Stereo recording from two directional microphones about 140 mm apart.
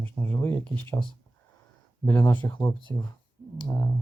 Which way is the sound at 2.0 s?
15° left (ahead or behind).